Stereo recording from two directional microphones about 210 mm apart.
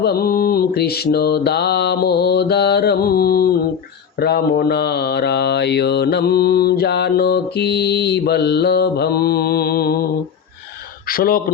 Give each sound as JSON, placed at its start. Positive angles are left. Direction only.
{"t": 0.0, "sound": "mantra", "side_deg": 45}
{"t": 11.1, "sound": "mantra", "side_deg": 45}